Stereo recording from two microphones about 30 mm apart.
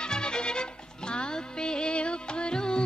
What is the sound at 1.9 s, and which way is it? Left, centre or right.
Music, left.